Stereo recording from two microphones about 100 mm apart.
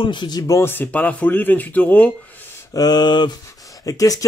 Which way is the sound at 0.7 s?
20° left (ahead or behind).